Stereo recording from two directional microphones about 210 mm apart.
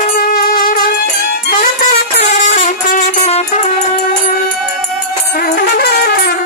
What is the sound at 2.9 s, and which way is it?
Music, 30° left (ahead or behind).